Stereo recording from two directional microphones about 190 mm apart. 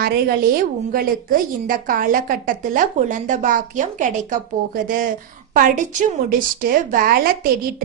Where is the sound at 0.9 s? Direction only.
45° right (ahead or behind).